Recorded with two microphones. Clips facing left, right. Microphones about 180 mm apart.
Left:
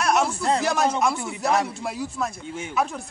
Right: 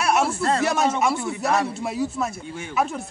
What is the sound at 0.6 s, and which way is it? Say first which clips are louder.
Speech: even; 5° right (ahead or behind).